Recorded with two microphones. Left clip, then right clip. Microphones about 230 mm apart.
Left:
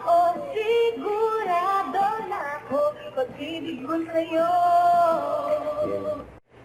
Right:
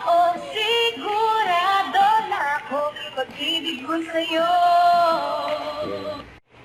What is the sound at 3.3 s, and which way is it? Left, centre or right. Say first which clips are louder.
Music: right 9 dB; right.